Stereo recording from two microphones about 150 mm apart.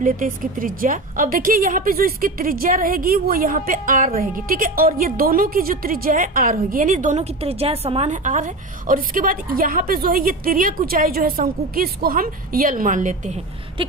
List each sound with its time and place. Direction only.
0.0 s a woman's voice: 65° right (ahead or behind); by 8.1 s 40° right (ahead or behind)
8.1 s a woman's voice: 55° right (ahead or behind)
13.8 s a sound: 35° right (ahead or behind)